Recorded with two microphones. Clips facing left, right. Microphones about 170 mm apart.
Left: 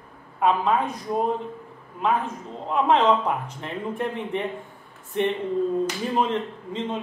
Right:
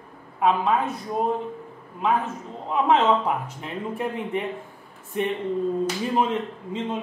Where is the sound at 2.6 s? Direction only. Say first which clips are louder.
Even; 5° right (ahead or behind).